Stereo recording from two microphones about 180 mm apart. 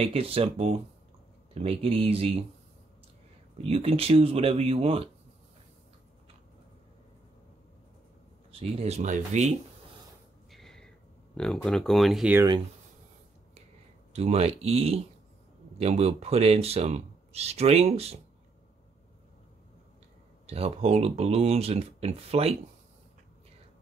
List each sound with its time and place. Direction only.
0.0 s speech: 30° right (ahead or behind)
3.6 s speech: 35° right (ahead or behind)
8.5 s speech: 30° right (ahead or behind)
10.5 s a sound: centre (ahead or behind)
11.3 s speech: 5° left (ahead or behind)
12.4 s speech: 25° right (ahead or behind)
14.1 s speech: 35° right (ahead or behind)
20.4 s speech: 35° right (ahead or behind)